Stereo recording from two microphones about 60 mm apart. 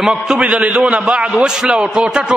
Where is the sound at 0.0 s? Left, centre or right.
Centre.